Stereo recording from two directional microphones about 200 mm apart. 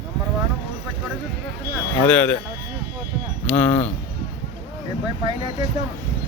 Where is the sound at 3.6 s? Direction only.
5° left (ahead or behind).